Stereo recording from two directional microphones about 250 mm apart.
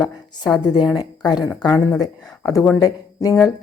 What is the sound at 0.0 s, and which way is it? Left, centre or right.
A woman's voice, centre.